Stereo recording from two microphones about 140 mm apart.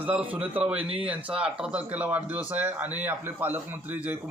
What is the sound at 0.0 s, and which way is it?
Speech, 10° right (ahead or behind).